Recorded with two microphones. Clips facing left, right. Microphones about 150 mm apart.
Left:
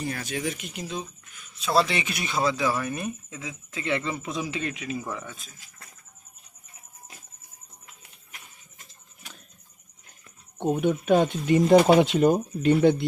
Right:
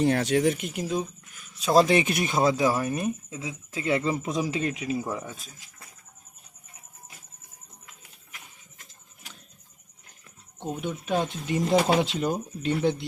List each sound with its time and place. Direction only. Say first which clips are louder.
0.0 s speech: right 8 dB; 70° right (ahead or behind); by 5.4 s 35° right (ahead or behind)
10.6 s speech: left 8 dB; 55° left (ahead or behind)